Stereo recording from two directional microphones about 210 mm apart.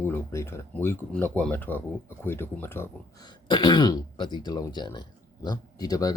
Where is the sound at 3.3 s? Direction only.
20° left (ahead or behind).